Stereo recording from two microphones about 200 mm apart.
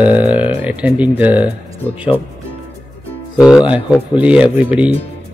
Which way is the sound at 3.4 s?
5° right (ahead or behind).